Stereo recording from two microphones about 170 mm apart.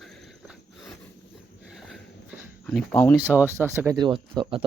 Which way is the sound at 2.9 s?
10° left (ahead or behind).